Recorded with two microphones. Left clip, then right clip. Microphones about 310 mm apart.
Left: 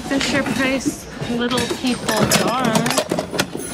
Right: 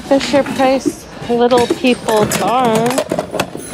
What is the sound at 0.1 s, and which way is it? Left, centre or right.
Speech, centre.